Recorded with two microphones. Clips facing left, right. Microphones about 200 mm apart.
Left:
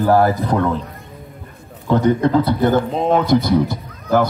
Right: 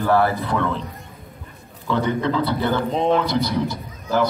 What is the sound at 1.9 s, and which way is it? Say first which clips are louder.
Speech: left 6 dB; 45° left (ahead or behind).